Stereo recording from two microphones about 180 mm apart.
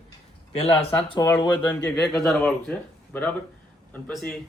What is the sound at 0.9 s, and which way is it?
Speech, 20° left (ahead or behind).